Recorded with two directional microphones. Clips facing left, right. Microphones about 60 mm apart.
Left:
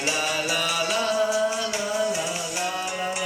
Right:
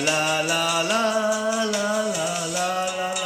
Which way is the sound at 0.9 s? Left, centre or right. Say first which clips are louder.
Even; right.